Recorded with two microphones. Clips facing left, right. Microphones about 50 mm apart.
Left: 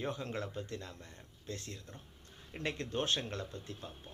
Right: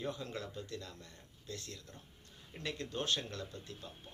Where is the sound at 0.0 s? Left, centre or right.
Left.